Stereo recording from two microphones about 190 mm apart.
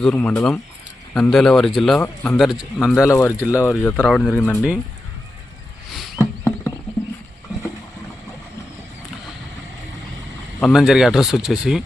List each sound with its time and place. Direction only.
0.1 s a man's voice: 10° left (ahead or behind)
3.0 s speech: 15° left (ahead or behind)
6.1 s a sound: 15° left (ahead or behind)
10.6 s a man's voice: centre (ahead or behind)